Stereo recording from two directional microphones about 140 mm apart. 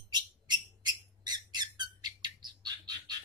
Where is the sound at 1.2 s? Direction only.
30° right (ahead or behind).